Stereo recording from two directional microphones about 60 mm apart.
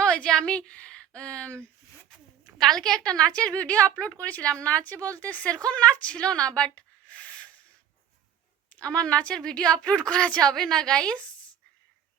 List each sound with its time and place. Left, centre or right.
0.0 s a woman's voice: centre
2.6 s a woman's voice: centre; by 7.5 s left
8.7 s a woman's voice: centre